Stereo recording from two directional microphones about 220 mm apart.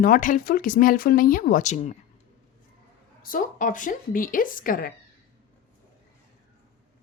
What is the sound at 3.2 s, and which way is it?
A woman's voice, 40° left (ahead or behind).